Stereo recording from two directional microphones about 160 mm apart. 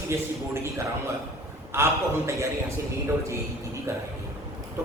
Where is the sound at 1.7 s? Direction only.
15° right (ahead or behind).